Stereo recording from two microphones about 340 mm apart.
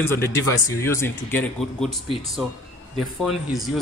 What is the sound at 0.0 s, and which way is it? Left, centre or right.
Speech, centre.